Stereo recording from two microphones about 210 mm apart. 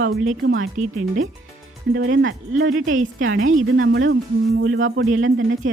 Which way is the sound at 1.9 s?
65° right (ahead or behind).